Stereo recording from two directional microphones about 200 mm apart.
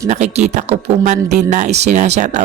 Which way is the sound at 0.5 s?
35° right (ahead or behind).